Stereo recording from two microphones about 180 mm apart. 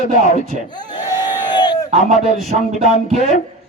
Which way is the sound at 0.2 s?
45° left (ahead or behind).